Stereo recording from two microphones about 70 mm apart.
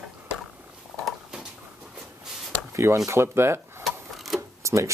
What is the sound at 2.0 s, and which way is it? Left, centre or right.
Writing, centre.